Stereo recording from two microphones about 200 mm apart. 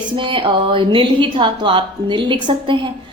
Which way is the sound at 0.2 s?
25° right (ahead or behind).